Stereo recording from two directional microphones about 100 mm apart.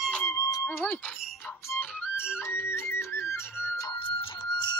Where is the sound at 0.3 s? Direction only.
35° left (ahead or behind).